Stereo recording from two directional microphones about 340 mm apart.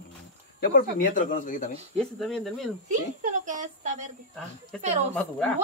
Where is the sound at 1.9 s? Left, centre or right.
Centre.